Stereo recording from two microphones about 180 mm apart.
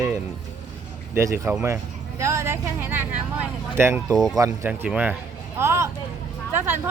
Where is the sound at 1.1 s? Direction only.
15° right (ahead or behind).